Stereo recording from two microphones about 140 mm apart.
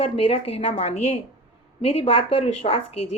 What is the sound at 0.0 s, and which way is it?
A woman's voice, 40° left (ahead or behind).